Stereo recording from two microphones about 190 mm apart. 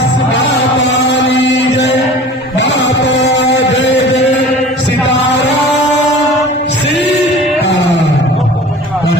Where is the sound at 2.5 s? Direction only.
65° left (ahead or behind).